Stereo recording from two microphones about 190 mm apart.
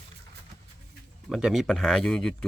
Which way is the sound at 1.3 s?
5° right (ahead or behind).